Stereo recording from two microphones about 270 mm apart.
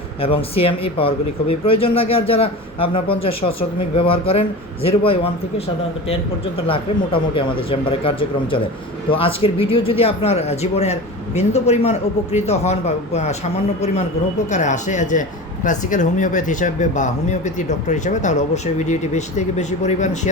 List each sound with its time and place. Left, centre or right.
0.2 s speech: left
6.7 s speech: centre
14.5 s speech: left